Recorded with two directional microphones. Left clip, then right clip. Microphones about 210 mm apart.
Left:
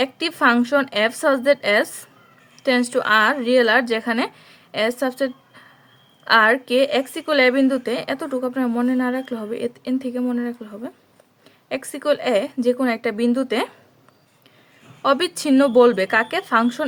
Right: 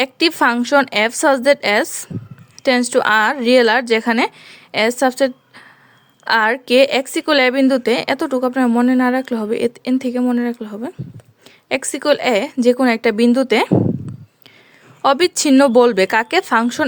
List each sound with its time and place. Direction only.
0.0 s a woman's voice: 35° right (ahead or behind)
15.0 s a woman's voice: 35° right (ahead or behind)